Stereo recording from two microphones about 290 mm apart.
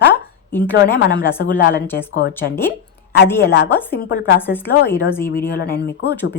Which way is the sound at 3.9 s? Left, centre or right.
Left.